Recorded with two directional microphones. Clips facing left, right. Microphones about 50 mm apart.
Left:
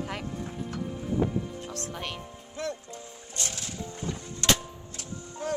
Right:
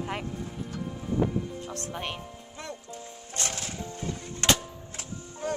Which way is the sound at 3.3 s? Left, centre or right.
Right.